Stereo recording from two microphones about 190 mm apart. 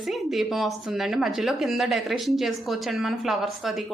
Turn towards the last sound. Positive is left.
turn(degrees=0)  # may be behind; listen again after turning